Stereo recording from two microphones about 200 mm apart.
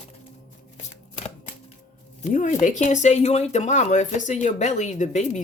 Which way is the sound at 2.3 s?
40° left (ahead or behind).